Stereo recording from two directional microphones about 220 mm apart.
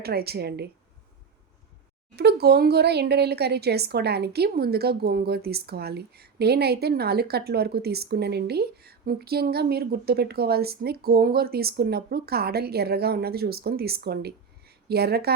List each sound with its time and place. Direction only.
0.0 s speech: 45° right (ahead or behind)
2.1 s speech: 45° right (ahead or behind)